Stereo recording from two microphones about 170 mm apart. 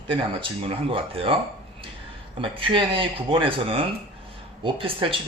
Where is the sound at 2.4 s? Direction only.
30° right (ahead or behind).